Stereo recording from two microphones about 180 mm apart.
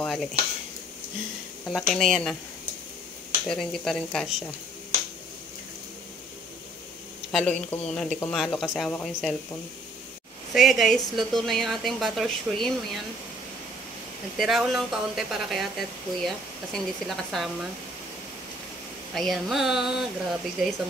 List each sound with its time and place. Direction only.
0.0 s speech: 5° left (ahead or behind)
1.7 s a woman's voice: centre (ahead or behind)
3.4 s a woman's voice: 5° left (ahead or behind)
7.3 s a woman's voice: 5° left (ahead or behind)
10.5 s a woman's voice: centre (ahead or behind)
14.3 s a woman's voice: centre (ahead or behind)
19.1 s a woman's voice: centre (ahead or behind)